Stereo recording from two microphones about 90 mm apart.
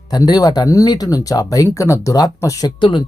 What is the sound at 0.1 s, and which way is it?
Speech, 45° left (ahead or behind).